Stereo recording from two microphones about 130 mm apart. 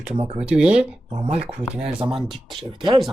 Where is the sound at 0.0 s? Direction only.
55° right (ahead or behind).